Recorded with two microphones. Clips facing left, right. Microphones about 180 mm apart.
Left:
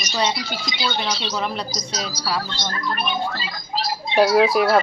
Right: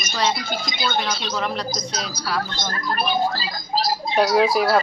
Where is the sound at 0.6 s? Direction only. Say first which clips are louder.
Even; 50° right (ahead or behind).